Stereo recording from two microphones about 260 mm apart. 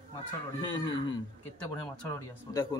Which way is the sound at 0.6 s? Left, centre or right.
Centre.